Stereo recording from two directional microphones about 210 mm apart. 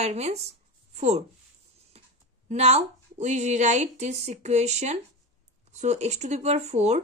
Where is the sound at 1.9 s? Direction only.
30° right (ahead or behind).